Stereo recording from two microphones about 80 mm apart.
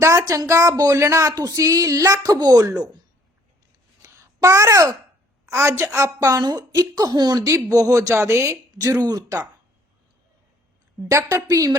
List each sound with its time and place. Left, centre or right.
0.0 s speech: right
4.0 s a sound: right
5.5 s speech: right
11.1 s speech: right
11.5 s speech: right